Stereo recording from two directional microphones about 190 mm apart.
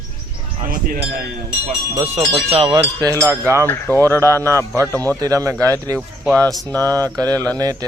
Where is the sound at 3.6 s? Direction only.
10° left (ahead or behind).